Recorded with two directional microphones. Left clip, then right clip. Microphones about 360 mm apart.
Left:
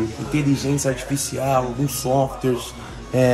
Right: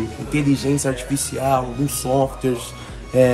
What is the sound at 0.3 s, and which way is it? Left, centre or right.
Speech, centre.